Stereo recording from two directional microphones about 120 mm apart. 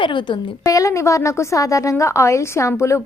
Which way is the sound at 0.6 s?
30° left (ahead or behind).